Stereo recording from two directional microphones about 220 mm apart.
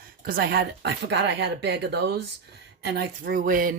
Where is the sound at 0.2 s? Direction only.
45° right (ahead or behind).